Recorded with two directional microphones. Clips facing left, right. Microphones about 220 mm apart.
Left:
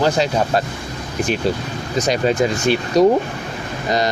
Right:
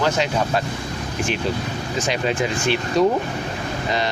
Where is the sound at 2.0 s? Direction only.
40° left (ahead or behind).